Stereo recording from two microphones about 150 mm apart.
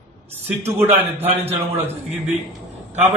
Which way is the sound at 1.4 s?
45° right (ahead or behind).